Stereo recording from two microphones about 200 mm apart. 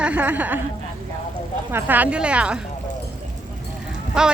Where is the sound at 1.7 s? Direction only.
10° right (ahead or behind).